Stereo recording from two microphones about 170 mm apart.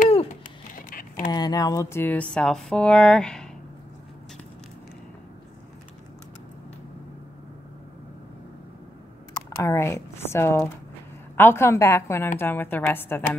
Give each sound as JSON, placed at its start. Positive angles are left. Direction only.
{"t": 0.7, "sound": "typing", "side_deg": 55}
{"t": 1.3, "sound": "speech", "side_deg": 25}
{"t": 9.3, "sound": "speech", "side_deg": 15}